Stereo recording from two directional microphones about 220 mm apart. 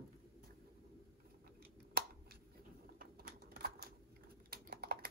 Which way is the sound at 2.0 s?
45° right (ahead or behind).